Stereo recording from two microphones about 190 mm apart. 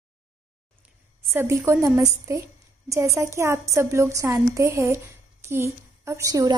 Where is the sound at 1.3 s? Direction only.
10° right (ahead or behind).